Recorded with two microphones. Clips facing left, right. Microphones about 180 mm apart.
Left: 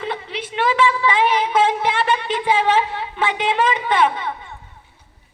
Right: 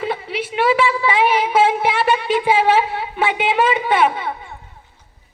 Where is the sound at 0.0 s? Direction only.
10° right (ahead or behind).